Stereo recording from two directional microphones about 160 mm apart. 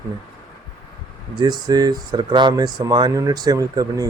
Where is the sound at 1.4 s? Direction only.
25° right (ahead or behind).